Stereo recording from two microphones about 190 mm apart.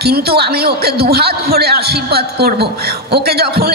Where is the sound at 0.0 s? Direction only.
55° right (ahead or behind).